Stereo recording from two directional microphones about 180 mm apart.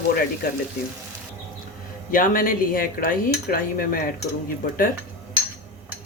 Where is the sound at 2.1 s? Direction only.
50° left (ahead or behind).